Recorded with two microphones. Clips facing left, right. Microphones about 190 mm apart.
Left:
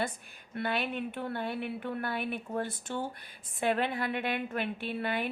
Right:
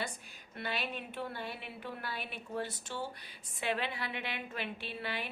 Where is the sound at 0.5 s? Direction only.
55° left (ahead or behind).